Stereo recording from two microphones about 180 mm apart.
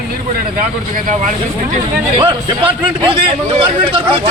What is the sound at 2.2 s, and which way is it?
A man's voice, 30° right (ahead or behind).